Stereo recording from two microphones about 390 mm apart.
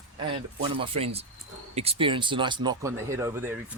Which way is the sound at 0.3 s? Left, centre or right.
Centre.